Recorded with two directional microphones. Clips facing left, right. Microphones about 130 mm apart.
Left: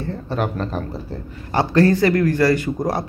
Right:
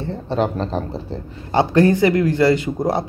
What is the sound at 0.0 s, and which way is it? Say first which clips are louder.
A man's voice: right 3 dB; 25° right (ahead or behind).